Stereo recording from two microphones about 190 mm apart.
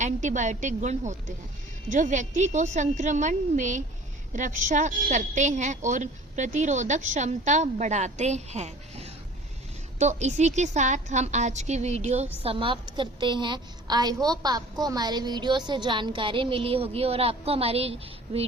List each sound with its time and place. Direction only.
0.0 s a woman's voice: 40° right (ahead or behind)